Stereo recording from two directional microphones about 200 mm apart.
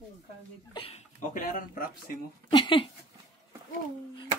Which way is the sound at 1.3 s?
45° left (ahead or behind).